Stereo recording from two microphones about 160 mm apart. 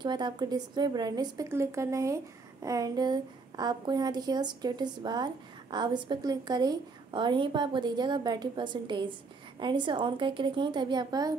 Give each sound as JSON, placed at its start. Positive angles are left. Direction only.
{"t": 0.0, "sound": "a woman's voice", "side_deg": -25}